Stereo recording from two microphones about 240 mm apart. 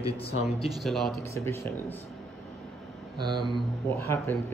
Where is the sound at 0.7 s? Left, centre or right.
Centre.